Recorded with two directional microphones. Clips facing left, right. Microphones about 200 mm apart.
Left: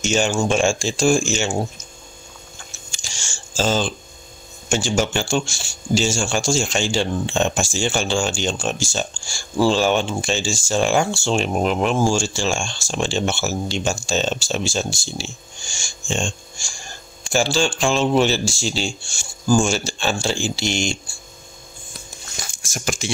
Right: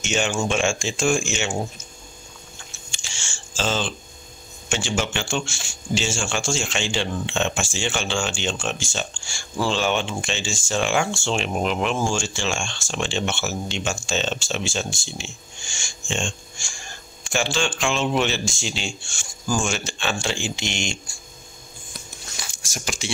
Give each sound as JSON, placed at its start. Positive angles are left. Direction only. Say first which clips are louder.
{"t": 0.0, "sound": "speech", "louder": "left 4 dB", "side_deg": 35}
{"t": 2.9, "sound": "camera", "louder": "left 2 dB", "side_deg": 40}
{"t": 4.6, "sound": "speech", "louder": "left 5 dB", "side_deg": 40}
{"t": 22.4, "sound": "speech", "louder": "left 4 dB", "side_deg": 50}